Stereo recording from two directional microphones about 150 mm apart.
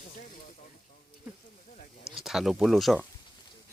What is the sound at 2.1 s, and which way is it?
Speech, 5° right (ahead or behind).